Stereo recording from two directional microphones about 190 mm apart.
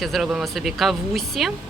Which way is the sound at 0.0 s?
Centre (ahead or behind).